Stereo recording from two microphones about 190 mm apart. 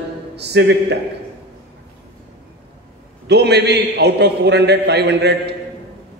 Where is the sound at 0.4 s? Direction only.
65° right (ahead or behind).